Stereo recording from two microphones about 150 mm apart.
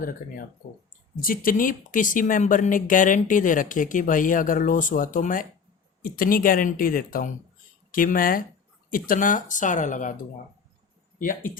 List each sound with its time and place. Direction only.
1.2 s speech: 70° left (ahead or behind)
6.0 s speech: 75° left (ahead or behind)